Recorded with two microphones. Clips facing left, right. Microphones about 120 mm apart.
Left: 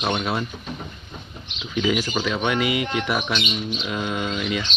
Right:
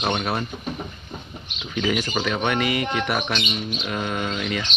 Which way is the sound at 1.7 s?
5° left (ahead or behind).